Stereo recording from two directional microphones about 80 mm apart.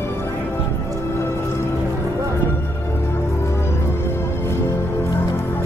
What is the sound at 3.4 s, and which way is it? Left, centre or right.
Music, left.